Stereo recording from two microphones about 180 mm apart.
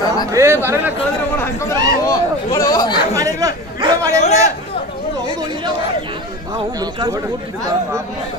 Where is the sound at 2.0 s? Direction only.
20° left (ahead or behind).